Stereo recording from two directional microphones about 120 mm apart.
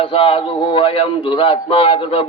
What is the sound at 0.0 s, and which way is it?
Speech, 50° left (ahead or behind).